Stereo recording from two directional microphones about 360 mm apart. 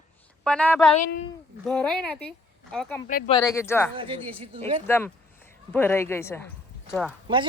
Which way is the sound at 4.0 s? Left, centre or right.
Centre.